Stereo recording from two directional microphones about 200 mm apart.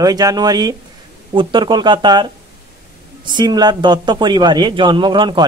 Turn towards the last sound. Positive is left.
turn(degrees=-25)  # may be behind; listen again after turning